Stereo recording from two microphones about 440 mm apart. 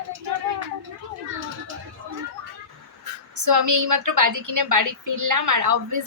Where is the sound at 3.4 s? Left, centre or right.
Right.